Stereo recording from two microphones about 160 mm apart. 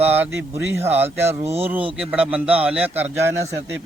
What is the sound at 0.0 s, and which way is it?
A man's voice, 10° right (ahead or behind).